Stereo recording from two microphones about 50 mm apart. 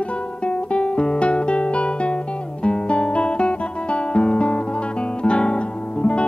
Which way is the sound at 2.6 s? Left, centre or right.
Left.